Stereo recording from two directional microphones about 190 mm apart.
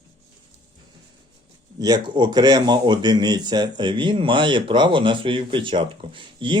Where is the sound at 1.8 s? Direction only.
20° right (ahead or behind).